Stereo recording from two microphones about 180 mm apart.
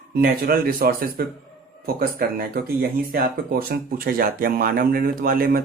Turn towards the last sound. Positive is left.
turn(degrees=-55)  # may be behind; listen again after turning